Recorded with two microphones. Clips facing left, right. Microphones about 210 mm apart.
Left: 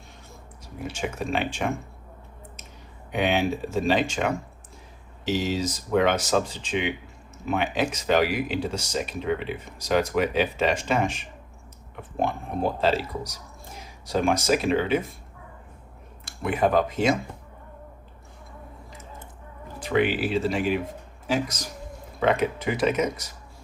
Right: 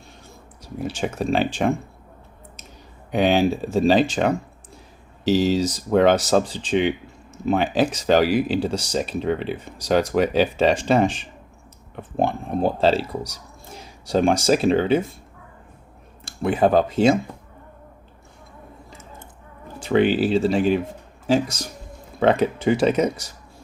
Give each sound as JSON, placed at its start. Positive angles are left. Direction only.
{"t": 0.6, "sound": "speech", "side_deg": -35}
{"t": 3.1, "sound": "speech", "side_deg": -35}
{"t": 12.8, "sound": "speech", "side_deg": -30}
{"t": 16.2, "sound": "speech", "side_deg": -30}
{"t": 19.8, "sound": "speech", "side_deg": -30}